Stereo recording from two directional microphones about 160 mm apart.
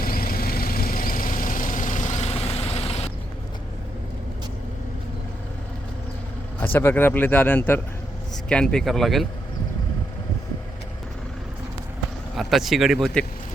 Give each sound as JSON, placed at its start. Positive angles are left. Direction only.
{"t": 0.0, "sound": "vehicle", "side_deg": 65}
{"t": 6.6, "sound": "speech", "side_deg": 10}
{"t": 12.4, "sound": "speech", "side_deg": 0}